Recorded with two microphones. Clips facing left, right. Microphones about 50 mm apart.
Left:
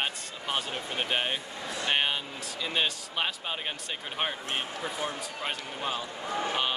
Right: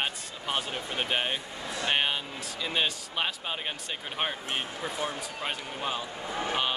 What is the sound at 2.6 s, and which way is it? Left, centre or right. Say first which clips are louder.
Speech: even; centre.